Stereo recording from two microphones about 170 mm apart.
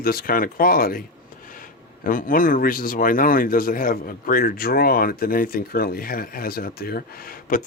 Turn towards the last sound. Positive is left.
turn(degrees=60)  # may be behind; listen again after turning